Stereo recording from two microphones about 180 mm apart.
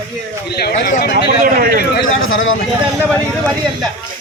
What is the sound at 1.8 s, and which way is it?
Speech, 65° left (ahead or behind).